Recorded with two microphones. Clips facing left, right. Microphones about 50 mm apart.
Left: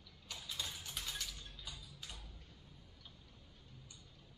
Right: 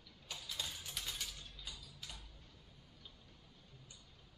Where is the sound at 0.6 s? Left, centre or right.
Centre.